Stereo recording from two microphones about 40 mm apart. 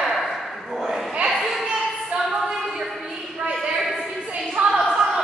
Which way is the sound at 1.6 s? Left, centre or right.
Right.